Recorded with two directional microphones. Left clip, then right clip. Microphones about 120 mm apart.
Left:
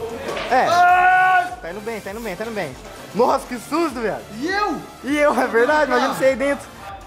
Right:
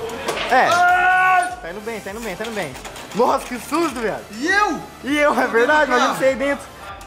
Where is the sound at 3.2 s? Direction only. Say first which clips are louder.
Even; 5° left (ahead or behind).